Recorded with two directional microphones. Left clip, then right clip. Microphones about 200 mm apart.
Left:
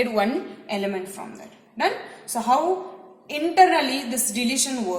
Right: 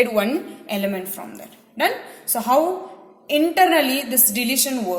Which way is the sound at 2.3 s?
45° right (ahead or behind).